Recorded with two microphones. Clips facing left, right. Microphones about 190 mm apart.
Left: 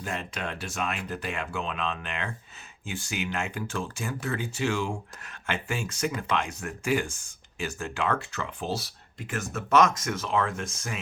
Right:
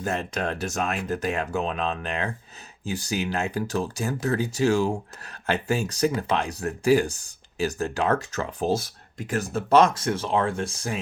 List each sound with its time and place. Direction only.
0.0 s speech: 40° right (ahead or behind)